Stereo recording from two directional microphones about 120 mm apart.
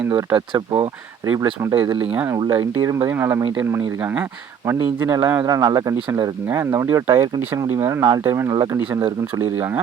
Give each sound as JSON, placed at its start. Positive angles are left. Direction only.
{"t": 0.3, "sound": "speech", "side_deg": -45}
{"t": 1.2, "sound": "speech", "side_deg": -25}